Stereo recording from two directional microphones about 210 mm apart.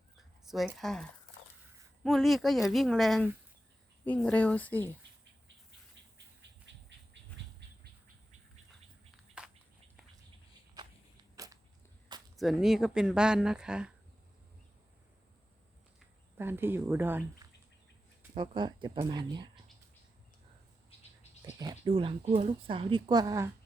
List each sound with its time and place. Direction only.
0.4 s speech: centre (ahead or behind)
2.0 s speech: centre (ahead or behind)
9.4 s a sound: 5° right (ahead or behind)
12.4 s speech: centre (ahead or behind)
16.4 s speech: 10° right (ahead or behind)
18.3 s speech: 25° right (ahead or behind)
21.6 s speech: 20° right (ahead or behind)